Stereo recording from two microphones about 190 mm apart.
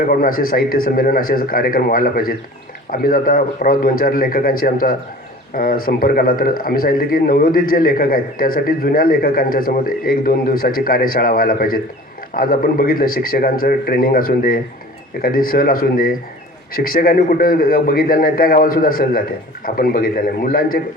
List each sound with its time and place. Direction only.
0.0 s a man's voice: 50° left (ahead or behind)